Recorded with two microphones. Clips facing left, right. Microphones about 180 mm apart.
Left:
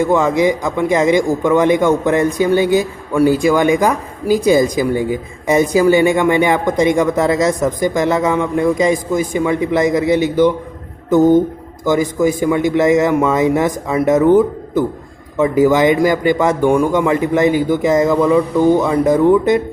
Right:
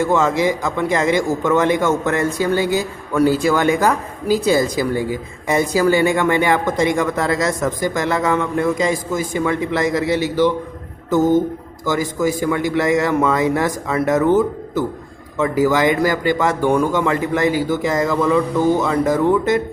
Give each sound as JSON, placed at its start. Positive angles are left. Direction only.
{"t": 0.0, "sound": "a man's voice", "side_deg": 15}